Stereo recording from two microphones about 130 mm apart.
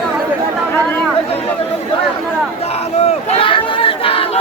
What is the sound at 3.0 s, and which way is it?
Crowd, 50° left (ahead or behind).